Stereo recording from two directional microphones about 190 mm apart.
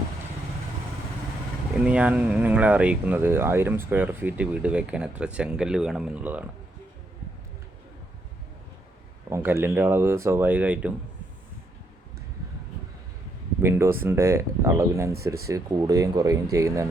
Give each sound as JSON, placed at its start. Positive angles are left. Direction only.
{"t": 1.8, "sound": "speech", "side_deg": -5}
{"t": 9.3, "sound": "speech", "side_deg": -10}
{"t": 13.6, "sound": "speech", "side_deg": -15}